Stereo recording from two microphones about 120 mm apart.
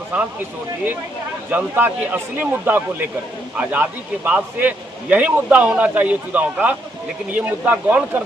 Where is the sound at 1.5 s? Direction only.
15° right (ahead or behind).